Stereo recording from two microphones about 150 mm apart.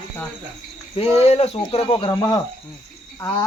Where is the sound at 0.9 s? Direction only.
40° left (ahead or behind).